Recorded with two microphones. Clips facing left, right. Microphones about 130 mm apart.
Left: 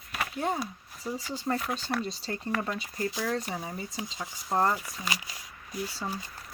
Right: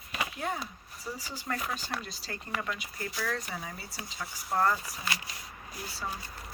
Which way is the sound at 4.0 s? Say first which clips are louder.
Left 3 dB; 15° left (ahead or behind).